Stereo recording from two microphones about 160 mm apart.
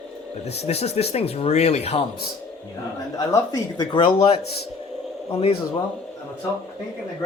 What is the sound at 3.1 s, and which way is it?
Speech, 25° left (ahead or behind).